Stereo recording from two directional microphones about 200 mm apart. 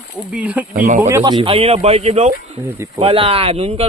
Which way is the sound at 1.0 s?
15° right (ahead or behind).